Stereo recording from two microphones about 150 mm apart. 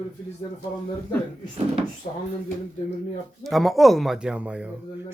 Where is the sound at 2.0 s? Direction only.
60° left (ahead or behind).